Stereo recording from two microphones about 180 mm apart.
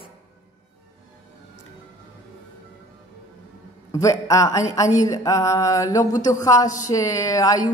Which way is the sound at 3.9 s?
20° left (ahead or behind).